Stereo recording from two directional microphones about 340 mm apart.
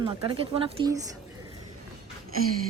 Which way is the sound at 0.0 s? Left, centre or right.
Centre.